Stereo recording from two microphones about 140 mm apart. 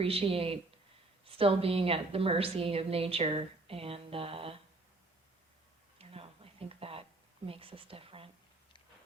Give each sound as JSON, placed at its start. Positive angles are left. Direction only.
{"t": 0.0, "sound": "a woman's voice", "side_deg": -45}
{"t": 6.0, "sound": "a sound", "side_deg": -45}
{"t": 7.4, "sound": "speech", "side_deg": -40}